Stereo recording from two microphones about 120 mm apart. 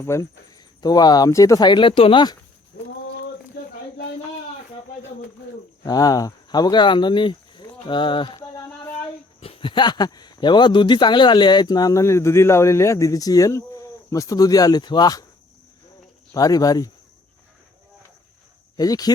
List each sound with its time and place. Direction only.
0.0 s a man's voice: 25° left (ahead or behind); by 2.2 s 50° left (ahead or behind)
5.8 s speech: 30° left (ahead or behind)
9.4 s a man's voice: 50° left (ahead or behind)
16.3 s a man's voice: 30° left (ahead or behind)
18.8 s a man's voice: 30° left (ahead or behind)